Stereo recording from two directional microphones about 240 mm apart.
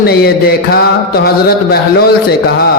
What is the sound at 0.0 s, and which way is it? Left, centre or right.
A man's voice, left.